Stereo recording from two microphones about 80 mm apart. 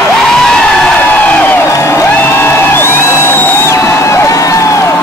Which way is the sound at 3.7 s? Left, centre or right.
Left.